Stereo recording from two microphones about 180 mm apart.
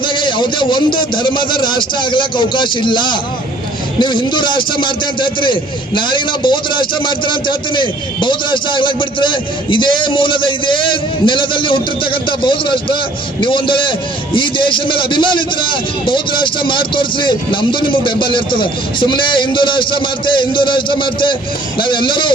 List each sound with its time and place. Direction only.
0.0 s a man's voice: 25° left (ahead or behind)